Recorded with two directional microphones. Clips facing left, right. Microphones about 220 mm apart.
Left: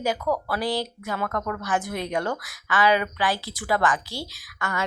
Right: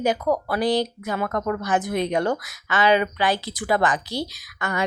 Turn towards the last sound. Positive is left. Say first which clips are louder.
# right 3 dB
turn(degrees=-20)  # may be behind; listen again after turning